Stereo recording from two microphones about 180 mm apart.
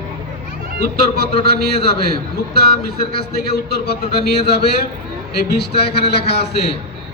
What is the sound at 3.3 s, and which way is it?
A man's voice, 60° left (ahead or behind).